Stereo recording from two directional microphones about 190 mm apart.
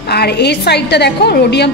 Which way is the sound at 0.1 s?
60° left (ahead or behind).